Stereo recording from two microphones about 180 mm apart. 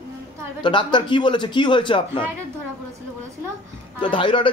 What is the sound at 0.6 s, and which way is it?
A man's voice, 25° left (ahead or behind).